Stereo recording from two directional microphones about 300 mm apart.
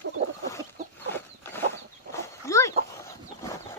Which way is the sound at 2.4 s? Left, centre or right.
Centre.